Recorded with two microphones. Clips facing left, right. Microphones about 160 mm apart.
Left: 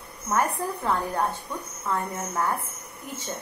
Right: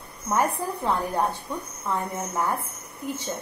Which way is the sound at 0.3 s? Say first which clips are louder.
Right 1 dB; 15° right (ahead or behind).